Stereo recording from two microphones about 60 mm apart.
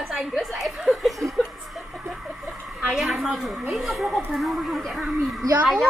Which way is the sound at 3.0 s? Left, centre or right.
Centre.